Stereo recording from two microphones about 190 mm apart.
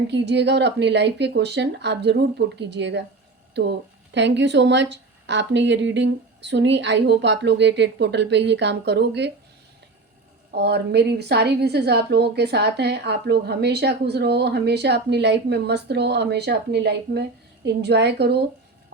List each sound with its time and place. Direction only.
0.1 s a woman's voice: 65° right (ahead or behind)
10.5 s a woman's voice: 60° right (ahead or behind)